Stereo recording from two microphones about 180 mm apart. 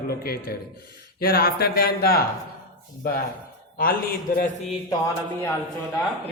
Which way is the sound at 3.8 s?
50° left (ahead or behind).